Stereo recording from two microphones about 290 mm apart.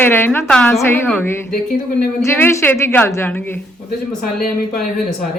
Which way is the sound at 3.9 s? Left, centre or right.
Left.